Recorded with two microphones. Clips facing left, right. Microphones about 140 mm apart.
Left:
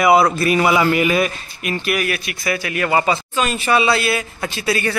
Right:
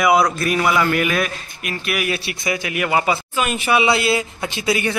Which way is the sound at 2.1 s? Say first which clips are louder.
Even; 25° right (ahead or behind).